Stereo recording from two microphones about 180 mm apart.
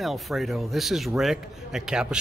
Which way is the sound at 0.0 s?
Centre (ahead or behind).